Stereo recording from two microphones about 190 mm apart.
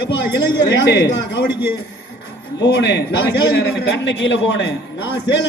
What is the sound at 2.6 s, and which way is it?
A man's voice, 65° left (ahead or behind).